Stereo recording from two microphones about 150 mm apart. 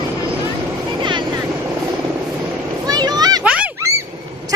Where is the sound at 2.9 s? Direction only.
25° right (ahead or behind).